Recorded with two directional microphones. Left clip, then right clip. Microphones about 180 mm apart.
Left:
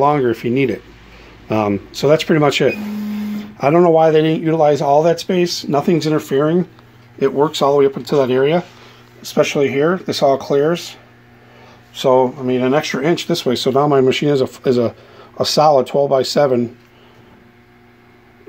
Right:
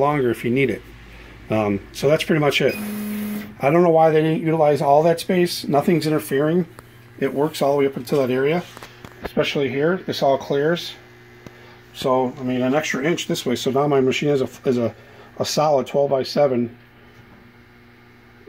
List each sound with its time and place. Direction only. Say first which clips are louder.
0.0 s speech: left 5 dB; 10° left (ahead or behind)
9.3 s speech: left 6 dB; 30° left (ahead or behind)
12.0 s speech: left 7 dB; 20° left (ahead or behind)